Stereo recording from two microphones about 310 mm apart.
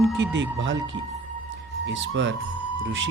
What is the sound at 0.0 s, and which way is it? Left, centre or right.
Speech, right.